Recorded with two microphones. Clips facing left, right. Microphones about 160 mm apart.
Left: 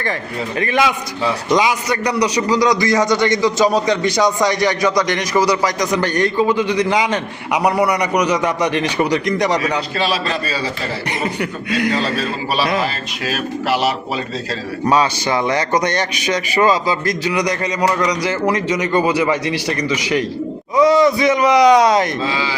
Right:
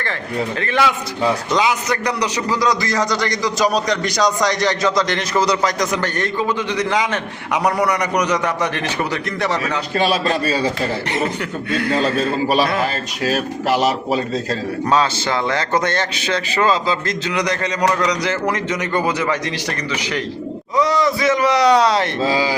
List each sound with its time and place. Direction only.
0.6 s a man's voice: 15° left (ahead or behind)
10.0 s a man's voice: 45° right (ahead or behind)
11.7 s a man's voice: 15° left (ahead or behind)
13.2 s speech: 40° right (ahead or behind)
14.8 s a man's voice: 15° left (ahead or behind)
22.2 s speech: 40° right (ahead or behind)